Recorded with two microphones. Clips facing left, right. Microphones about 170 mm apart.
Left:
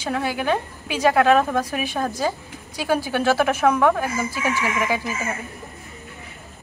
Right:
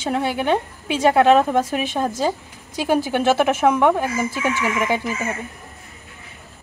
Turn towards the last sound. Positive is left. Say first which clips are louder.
# right 2 dB
turn(degrees=-20)  # may be behind; listen again after turning